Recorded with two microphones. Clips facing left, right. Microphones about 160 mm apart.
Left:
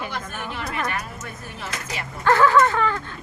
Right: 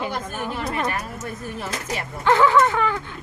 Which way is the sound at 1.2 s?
50° right (ahead or behind).